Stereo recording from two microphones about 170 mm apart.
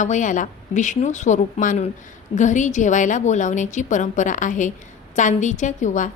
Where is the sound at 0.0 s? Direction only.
45° left (ahead or behind).